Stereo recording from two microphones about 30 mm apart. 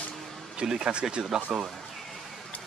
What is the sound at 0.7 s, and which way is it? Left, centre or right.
Speech, right.